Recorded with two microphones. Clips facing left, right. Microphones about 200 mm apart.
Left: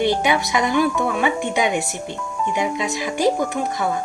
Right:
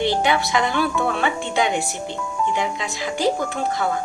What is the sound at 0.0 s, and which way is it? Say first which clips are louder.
Speech: left 1 dB; 20° left (ahead or behind).